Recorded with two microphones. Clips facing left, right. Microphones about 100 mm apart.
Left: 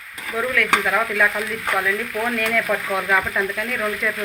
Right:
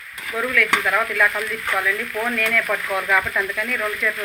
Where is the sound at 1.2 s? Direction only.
10° left (ahead or behind).